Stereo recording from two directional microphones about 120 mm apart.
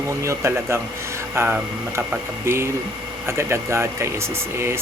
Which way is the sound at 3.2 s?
20° right (ahead or behind).